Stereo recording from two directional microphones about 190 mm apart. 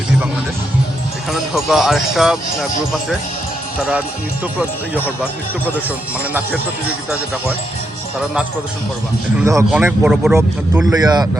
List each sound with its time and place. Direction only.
1.3 s speech: centre (ahead or behind)
4.5 s speech: 5° right (ahead or behind)
9.4 s speech: 15° right (ahead or behind)
10.9 s speech: 20° right (ahead or behind)